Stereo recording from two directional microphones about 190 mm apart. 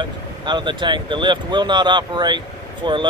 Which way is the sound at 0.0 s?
25° right (ahead or behind).